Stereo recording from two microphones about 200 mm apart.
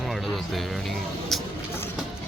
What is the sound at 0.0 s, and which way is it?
Music, centre (ahead or behind).